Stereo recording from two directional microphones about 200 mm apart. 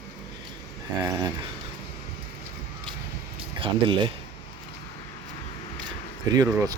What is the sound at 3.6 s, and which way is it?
Speech, 25° right (ahead or behind).